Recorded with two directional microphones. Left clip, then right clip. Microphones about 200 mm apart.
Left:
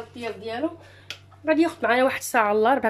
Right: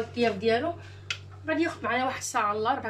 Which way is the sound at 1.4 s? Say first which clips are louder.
Left 8 dB; 55° left (ahead or behind).